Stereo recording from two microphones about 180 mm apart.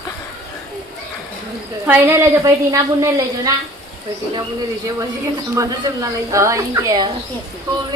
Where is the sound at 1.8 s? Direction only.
10° right (ahead or behind).